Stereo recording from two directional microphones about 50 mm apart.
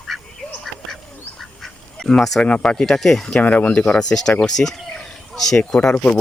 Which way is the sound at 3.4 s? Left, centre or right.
Left.